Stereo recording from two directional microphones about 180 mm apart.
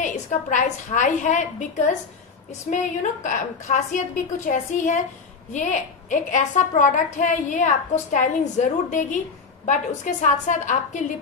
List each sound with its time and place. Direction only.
0.0 s a woman's voice: 45° left (ahead or behind)